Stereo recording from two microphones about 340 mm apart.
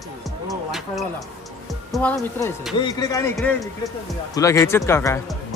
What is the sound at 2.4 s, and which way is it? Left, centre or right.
Speech, centre.